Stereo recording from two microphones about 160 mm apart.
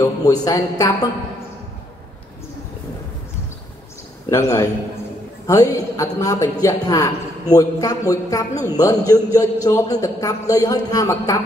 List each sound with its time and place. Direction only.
0.0 s a man's voice: 25° left (ahead or behind)
4.3 s a man's voice: 20° left (ahead or behind)